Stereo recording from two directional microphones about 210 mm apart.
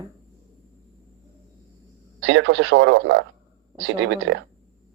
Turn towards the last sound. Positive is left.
turn(degrees=-65)  # may be behind; listen again after turning